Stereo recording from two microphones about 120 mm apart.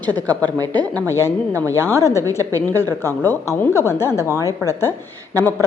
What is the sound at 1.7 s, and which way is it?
A woman's voice, 20° left (ahead or behind).